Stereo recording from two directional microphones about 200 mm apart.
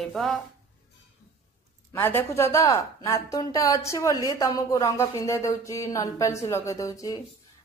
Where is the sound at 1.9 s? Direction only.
10° left (ahead or behind).